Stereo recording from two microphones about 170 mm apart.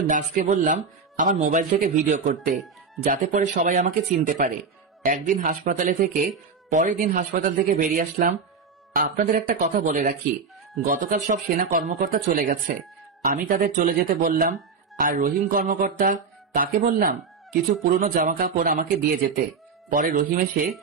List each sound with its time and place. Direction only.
0.1 s speech: 50° right (ahead or behind)
8.9 s music: 55° right (ahead or behind)
10.9 s speech: 50° right (ahead or behind)
13.2 s music: 55° right (ahead or behind)
17.8 s speech: 55° right (ahead or behind)
18.4 s music: 55° right (ahead or behind)
19.9 s speech: 50° right (ahead or behind)